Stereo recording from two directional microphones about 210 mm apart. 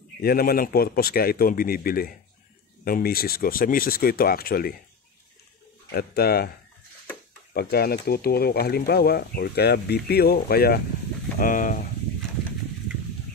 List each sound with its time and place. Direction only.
0.2 s speech: 45° left (ahead or behind)
5.9 s speech: 50° left (ahead or behind)
7.5 s speech: 50° left (ahead or behind)